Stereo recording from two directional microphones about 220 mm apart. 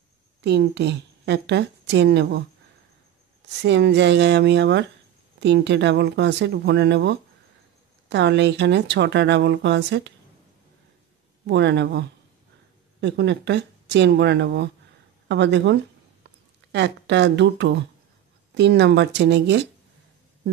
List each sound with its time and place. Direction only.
0.4 s a woman's voice: 50° right (ahead or behind)
3.6 s a woman's voice: 50° right (ahead or behind)
11.4 s a woman's voice: 50° right (ahead or behind)